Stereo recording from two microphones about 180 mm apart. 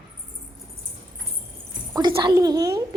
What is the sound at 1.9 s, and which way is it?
Speech, 25° right (ahead or behind).